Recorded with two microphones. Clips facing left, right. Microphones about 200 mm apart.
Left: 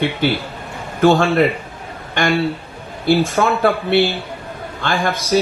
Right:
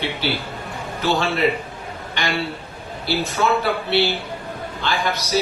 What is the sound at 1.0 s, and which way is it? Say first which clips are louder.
Speech: left 7 dB; 50° left (ahead or behind).